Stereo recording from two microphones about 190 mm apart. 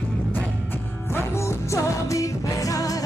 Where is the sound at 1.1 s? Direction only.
15° left (ahead or behind).